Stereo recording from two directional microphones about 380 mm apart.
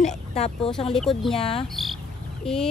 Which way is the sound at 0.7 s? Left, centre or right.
Centre.